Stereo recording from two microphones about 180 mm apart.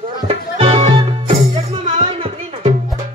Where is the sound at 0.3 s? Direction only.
30° right (ahead or behind).